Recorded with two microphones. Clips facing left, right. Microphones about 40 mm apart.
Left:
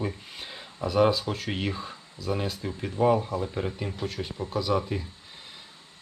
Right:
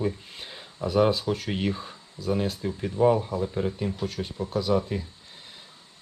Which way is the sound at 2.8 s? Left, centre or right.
Left.